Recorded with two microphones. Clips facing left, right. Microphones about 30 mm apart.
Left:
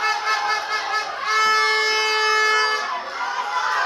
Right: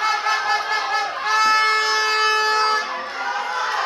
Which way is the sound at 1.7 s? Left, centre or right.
Centre.